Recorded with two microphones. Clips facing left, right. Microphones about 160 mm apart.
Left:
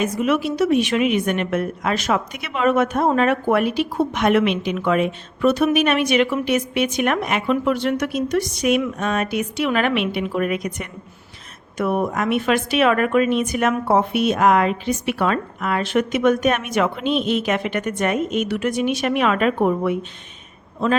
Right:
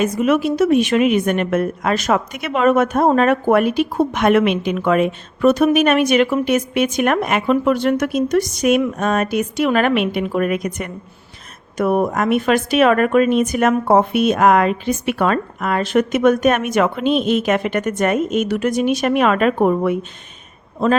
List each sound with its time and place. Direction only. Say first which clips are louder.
0.0 s a woman's voice: right 4 dB; 45° right (ahead or behind)